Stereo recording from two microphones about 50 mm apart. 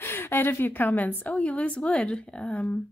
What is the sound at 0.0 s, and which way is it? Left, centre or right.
A woman's voice, left.